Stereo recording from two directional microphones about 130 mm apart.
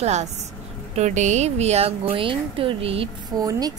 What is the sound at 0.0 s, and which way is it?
Speech, 60° right (ahead or behind).